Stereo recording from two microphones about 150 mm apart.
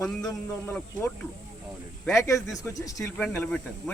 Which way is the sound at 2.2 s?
20° left (ahead or behind).